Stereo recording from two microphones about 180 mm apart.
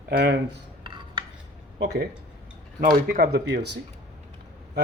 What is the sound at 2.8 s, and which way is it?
Speech, 55° right (ahead or behind).